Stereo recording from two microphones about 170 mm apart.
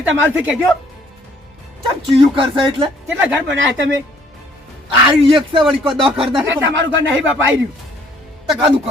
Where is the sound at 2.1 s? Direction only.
30° right (ahead or behind).